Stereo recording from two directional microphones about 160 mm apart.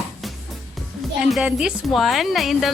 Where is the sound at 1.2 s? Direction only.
5° right (ahead or behind).